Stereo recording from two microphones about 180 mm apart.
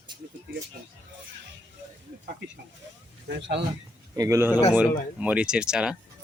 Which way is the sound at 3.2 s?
70° right (ahead or behind).